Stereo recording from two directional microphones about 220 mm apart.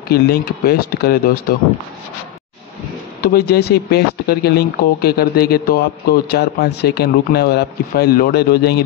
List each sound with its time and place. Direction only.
0.1 s speech: 45° left (ahead or behind)
3.2 s speech: 45° left (ahead or behind)